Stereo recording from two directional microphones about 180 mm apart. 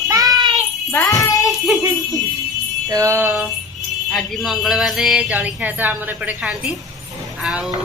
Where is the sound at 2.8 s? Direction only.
15° right (ahead or behind).